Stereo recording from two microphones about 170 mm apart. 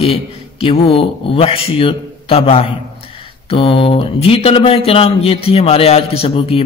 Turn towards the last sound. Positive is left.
turn(degrees=35)  # may be behind; listen again after turning